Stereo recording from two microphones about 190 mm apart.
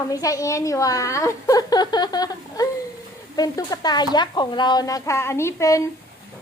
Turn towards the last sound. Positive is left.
turn(degrees=15)  # may be behind; listen again after turning